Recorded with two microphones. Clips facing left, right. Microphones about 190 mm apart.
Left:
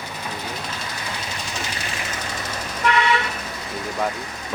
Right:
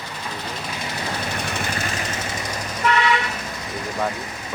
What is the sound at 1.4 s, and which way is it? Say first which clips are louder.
Vehicle: right 4 dB; 60° right (ahead or behind).